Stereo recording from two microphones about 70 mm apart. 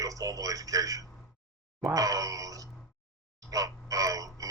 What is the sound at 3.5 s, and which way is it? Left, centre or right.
Clock, right.